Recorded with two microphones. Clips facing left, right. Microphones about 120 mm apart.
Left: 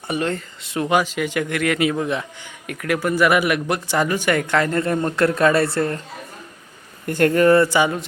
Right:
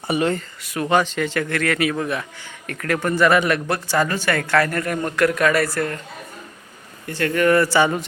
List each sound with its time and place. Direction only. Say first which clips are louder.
0.1 s speech: right 3 dB; 10° right (ahead or behind)
0.6 s speech: left 2 dB; 25° left (ahead or behind)
0.9 s speech: right 1 dB; 10° left (ahead or behind); by 6.0 s 25° left (ahead or behind)
7.1 s speech: left 6 dB; 50° left (ahead or behind)
7.3 s speech: left 1 dB; 30° left (ahead or behind)